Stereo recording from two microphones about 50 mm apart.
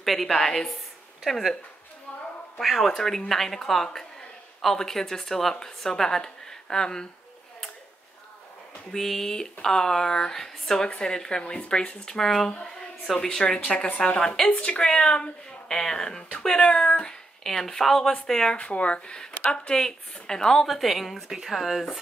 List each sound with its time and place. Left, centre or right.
0.0 s a woman's voice: centre
2.6 s a woman's voice: centre
8.9 s a woman's voice: centre
12.6 s a sound: centre
13.4 s a woman's voice: centre
16.3 s speech: left
17.4 s a woman's voice: centre
18.6 s a woman's voice: left; by 20.6 s centre
20.6 s speech: centre